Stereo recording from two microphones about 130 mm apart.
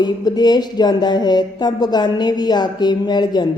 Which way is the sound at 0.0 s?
30° left (ahead or behind).